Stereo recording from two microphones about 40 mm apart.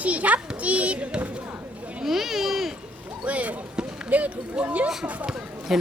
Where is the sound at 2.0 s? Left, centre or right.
Centre.